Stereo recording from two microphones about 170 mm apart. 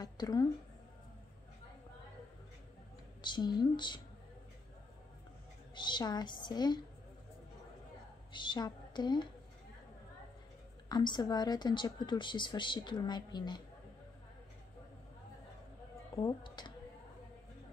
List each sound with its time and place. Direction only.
0.0 s a woman's voice: 20° left (ahead or behind)
3.2 s speech: 25° left (ahead or behind)
5.8 s speech: 25° left (ahead or behind)
8.3 s a woman's voice: 25° left (ahead or behind)
10.9 s speech: 25° left (ahead or behind)
16.2 s speech: 25° left (ahead or behind)